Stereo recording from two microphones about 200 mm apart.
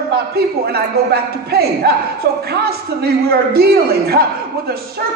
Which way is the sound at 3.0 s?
50° right (ahead or behind).